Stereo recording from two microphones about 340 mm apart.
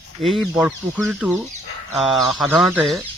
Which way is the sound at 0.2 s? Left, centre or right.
Centre.